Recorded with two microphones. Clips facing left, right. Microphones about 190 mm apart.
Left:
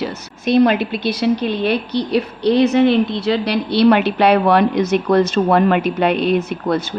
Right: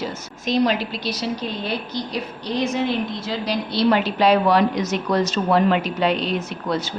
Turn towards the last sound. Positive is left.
turn(degrees=55)  # may be behind; listen again after turning